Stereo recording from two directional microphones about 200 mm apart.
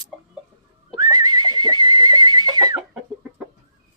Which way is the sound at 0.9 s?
20° right (ahead or behind).